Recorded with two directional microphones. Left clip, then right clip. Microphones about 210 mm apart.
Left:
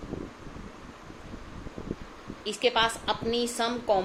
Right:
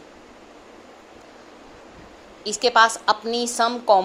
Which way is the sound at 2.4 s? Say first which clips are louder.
Right 8 dB; 20° right (ahead or behind).